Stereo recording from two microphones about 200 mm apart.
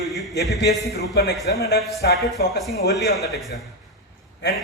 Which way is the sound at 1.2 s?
55° left (ahead or behind).